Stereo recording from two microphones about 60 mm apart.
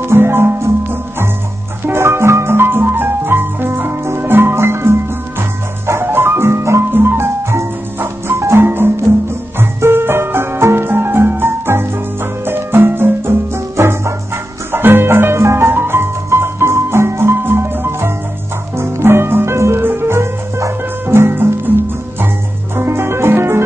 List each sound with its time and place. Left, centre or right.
0.0 s music: right
6.9 s music: right
13.7 s music: right
22.8 s music: right